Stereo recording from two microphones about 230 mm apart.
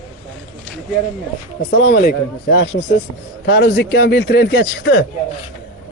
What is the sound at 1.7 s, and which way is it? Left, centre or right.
Speech, left.